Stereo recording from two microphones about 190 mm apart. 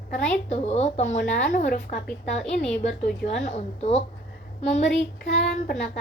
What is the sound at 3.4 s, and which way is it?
Speech, 35° left (ahead or behind).